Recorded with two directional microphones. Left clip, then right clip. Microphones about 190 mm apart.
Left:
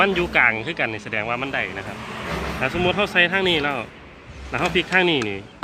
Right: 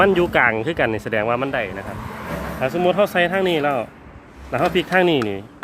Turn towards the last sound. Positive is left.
turn(degrees=-45)  # may be behind; listen again after turning